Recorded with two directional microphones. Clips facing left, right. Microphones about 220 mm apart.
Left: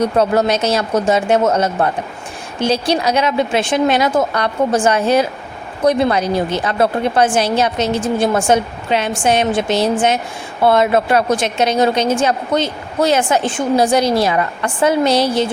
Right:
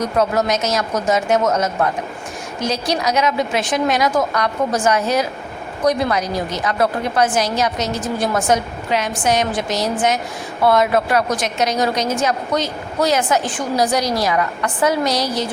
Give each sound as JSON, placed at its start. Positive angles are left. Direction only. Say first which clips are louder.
{"t": 0.0, "sound": "a woman's voice", "louder": "left 4 dB", "side_deg": 30}